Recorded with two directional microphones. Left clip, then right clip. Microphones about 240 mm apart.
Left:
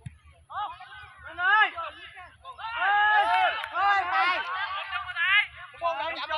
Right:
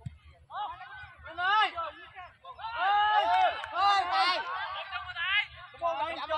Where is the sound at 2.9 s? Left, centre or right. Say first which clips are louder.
Left 3 dB; right.